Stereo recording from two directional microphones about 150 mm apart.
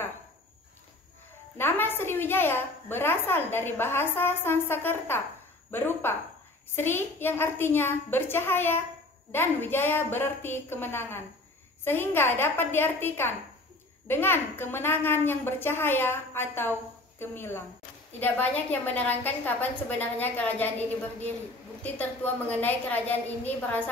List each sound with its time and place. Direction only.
1.6 s a woman's voice: 15° left (ahead or behind)
21.9 s a woman's voice: 10° left (ahead or behind)